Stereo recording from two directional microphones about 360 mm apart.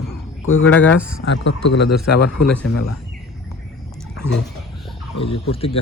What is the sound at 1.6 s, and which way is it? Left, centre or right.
Speech, left.